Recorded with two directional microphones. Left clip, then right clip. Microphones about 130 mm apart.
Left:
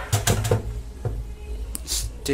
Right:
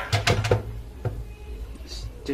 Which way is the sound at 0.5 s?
10° right (ahead or behind).